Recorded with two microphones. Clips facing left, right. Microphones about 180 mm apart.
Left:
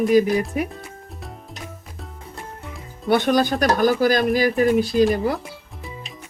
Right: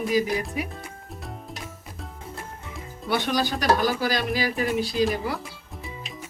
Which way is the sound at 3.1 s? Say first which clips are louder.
Left 7 dB; 50° left (ahead or behind).